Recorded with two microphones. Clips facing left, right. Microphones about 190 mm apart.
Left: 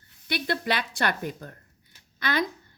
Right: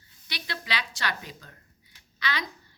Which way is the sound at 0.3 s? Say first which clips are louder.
Left 9 dB; 55° left (ahead or behind).